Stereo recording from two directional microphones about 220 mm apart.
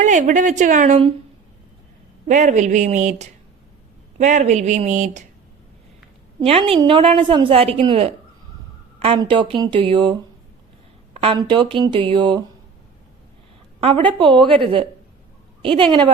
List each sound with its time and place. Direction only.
0.0 s a woman's voice: 35° right (ahead or behind)
2.2 s a woman's voice: 35° right (ahead or behind)
6.4 s a woman's voice: 25° right (ahead or behind)
13.8 s a woman's voice: 25° right (ahead or behind)